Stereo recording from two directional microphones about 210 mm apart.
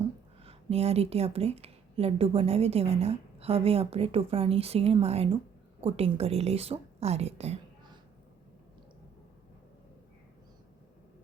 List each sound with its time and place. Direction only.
0.4 s a woman's voice: 30° right (ahead or behind)